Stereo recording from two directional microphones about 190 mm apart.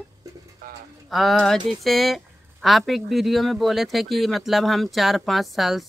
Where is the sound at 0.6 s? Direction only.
50° right (ahead or behind).